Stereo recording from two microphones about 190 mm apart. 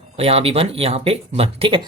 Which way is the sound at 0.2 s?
30° right (ahead or behind).